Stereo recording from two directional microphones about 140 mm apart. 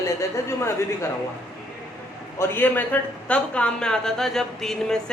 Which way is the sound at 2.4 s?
15° left (ahead or behind).